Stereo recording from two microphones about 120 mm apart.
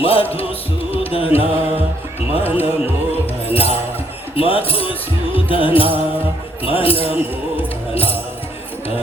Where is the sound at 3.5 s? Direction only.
55° left (ahead or behind).